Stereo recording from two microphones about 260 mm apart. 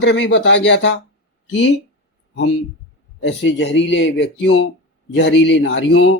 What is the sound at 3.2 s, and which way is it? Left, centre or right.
Speech, left.